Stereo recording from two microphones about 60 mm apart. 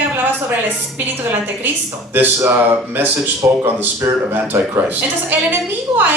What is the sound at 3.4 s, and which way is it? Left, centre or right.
Speech, right.